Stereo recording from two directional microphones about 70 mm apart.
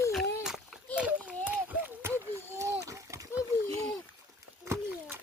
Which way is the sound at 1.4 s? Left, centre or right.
Right.